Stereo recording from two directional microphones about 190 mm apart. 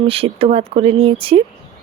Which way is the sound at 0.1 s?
30° right (ahead or behind).